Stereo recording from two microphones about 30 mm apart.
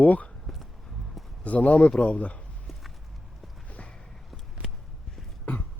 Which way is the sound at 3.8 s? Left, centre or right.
Left.